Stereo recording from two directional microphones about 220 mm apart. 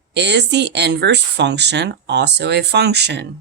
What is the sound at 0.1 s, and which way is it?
Speech, 50° right (ahead or behind).